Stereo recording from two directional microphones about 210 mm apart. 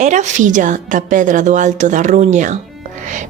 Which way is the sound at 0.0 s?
35° right (ahead or behind).